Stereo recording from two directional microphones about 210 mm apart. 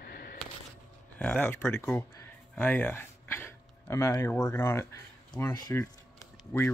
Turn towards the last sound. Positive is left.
turn(degrees=10)  # may be behind; listen again after turning